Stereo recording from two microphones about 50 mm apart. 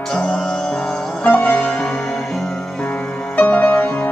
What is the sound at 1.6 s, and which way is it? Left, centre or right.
Music, centre.